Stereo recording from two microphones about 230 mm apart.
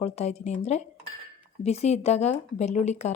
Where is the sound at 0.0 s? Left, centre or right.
Left.